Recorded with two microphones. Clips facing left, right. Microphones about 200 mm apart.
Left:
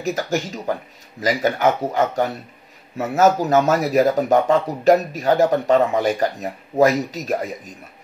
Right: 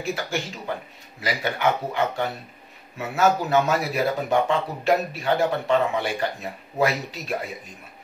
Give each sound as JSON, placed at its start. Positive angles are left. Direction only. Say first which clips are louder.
{"t": 0.0, "sound": "speech", "louder": "left 5 dB", "side_deg": 40}